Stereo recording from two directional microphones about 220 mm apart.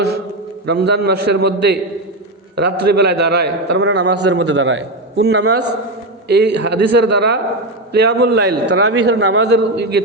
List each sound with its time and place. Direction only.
0.6 s a man's voice: 50° right (ahead or behind)